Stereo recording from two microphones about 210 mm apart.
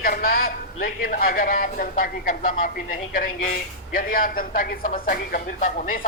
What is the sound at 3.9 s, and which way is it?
Speech, 40° left (ahead or behind).